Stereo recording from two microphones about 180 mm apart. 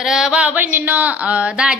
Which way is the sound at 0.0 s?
5° right (ahead or behind).